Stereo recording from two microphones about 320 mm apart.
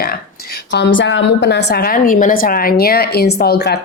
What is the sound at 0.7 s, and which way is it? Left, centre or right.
A woman's voice, left.